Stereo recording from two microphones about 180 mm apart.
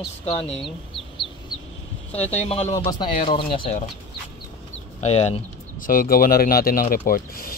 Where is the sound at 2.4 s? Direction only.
40° left (ahead or behind).